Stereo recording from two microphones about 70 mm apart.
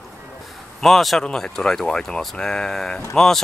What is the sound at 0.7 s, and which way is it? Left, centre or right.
Speech, centre.